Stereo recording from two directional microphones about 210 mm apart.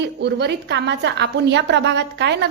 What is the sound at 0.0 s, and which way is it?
A woman's voice, 55° right (ahead or behind).